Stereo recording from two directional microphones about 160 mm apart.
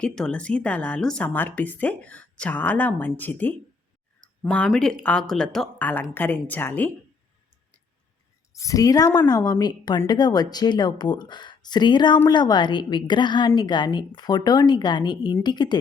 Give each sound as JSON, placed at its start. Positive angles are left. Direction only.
{"t": 0.0, "sound": "speech", "side_deg": 5}
{"t": 8.5, "sound": "a woman's voice", "side_deg": 20}